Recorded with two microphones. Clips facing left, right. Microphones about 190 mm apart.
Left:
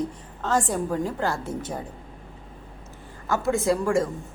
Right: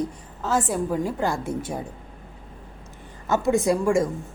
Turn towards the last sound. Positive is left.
turn(degrees=-15)  # may be behind; listen again after turning